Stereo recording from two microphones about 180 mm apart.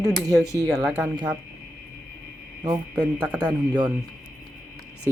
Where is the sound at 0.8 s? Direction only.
5° right (ahead or behind).